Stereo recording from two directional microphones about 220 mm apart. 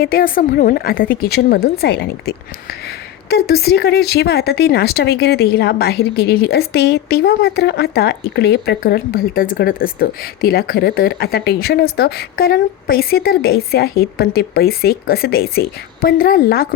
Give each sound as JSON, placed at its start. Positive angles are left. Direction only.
{"t": 0.0, "sound": "speech", "side_deg": 40}